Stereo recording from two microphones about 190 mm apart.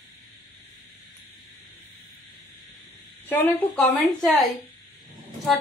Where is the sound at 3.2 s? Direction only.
10° left (ahead or behind).